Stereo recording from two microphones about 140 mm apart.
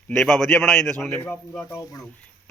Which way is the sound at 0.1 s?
5° left (ahead or behind).